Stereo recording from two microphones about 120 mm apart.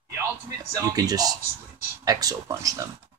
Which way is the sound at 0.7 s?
30° right (ahead or behind).